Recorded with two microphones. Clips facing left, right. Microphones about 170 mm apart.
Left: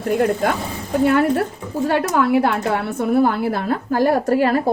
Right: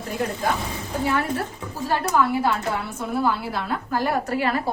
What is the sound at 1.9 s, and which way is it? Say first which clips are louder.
A woman's voice: left 4 dB; 65° left (ahead or behind).